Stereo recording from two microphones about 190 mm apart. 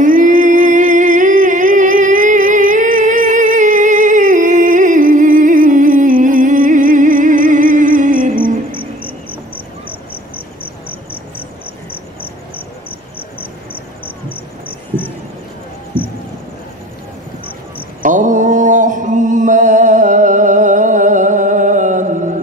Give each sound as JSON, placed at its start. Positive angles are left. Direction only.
{"t": 0.0, "sound": "music", "side_deg": -45}
{"t": 10.3, "sound": "cricket", "side_deg": 30}
{"t": 15.9, "sound": "insect", "side_deg": 10}
{"t": 18.0, "sound": "chant", "side_deg": -40}